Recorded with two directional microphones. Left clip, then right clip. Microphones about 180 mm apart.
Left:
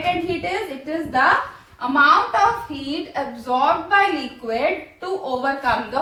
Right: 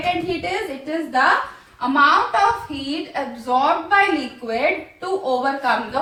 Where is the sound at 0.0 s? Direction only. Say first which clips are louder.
Even; 10° left (ahead or behind).